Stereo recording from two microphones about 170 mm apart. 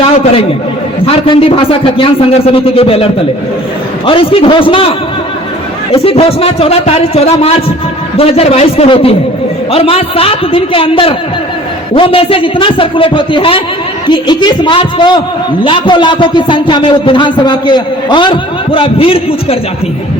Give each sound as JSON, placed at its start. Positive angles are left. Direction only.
{"t": 1.0, "sound": "a man's voice", "side_deg": 35}